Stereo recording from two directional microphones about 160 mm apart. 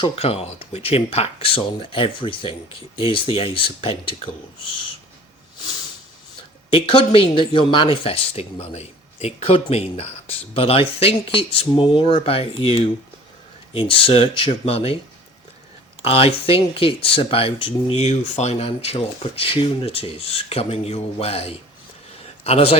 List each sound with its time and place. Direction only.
0.0 s speech: 40° left (ahead or behind)
6.7 s speech: 35° left (ahead or behind)
16.0 s speech: 35° left (ahead or behind)